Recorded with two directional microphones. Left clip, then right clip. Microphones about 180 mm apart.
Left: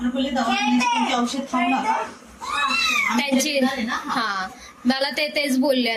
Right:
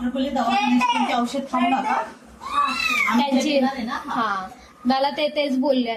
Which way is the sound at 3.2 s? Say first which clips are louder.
Right 1 dB; 10° left (ahead or behind).